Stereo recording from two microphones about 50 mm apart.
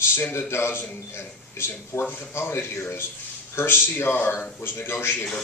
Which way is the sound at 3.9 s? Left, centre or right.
Left.